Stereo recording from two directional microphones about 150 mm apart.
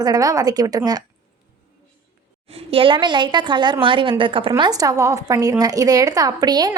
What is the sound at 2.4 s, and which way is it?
A woman's voice, 40° right (ahead or behind).